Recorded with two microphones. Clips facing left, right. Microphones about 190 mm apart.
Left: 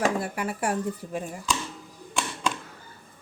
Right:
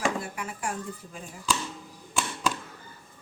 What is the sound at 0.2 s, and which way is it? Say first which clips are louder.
A woman's voice: left 6 dB; 65° left (ahead or behind).